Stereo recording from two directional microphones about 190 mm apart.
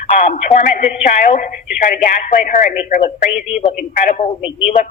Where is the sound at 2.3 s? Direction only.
45° left (ahead or behind).